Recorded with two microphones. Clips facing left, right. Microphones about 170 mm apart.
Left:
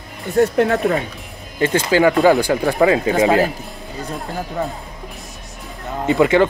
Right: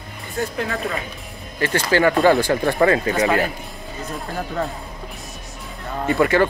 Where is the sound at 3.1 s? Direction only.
25° left (ahead or behind).